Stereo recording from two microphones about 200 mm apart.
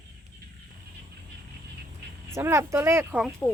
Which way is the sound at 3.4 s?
10° left (ahead or behind).